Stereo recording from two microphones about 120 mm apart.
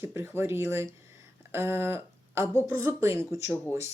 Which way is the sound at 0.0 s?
20° right (ahead or behind).